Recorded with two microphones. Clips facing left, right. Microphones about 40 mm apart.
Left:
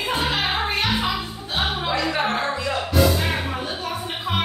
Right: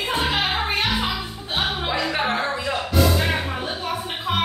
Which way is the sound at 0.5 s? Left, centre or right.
Centre.